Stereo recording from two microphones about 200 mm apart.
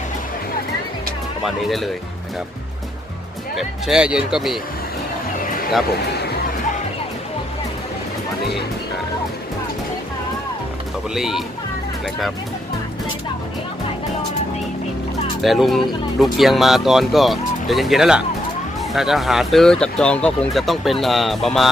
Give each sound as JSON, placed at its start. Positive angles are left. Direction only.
{"t": 1.4, "sound": "speech", "side_deg": 0}
{"t": 3.5, "sound": "speech", "side_deg": 0}
{"t": 5.9, "sound": "a sound", "side_deg": 55}
{"t": 11.1, "sound": "speech", "side_deg": 0}
{"t": 15.4, "sound": "speech", "side_deg": 0}